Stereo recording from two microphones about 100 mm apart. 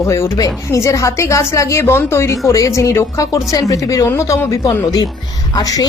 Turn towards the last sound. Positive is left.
turn(degrees=40)  # may be behind; listen again after turning